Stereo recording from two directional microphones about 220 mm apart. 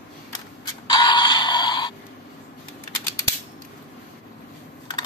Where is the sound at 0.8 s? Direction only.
20° left (ahead or behind).